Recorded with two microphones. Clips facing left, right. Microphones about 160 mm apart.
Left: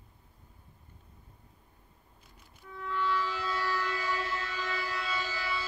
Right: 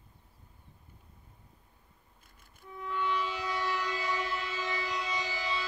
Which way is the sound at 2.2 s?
50° right (ahead or behind).